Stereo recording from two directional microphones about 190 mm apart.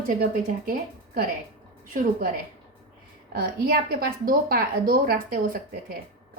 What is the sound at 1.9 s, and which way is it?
Speech, 45° right (ahead or behind).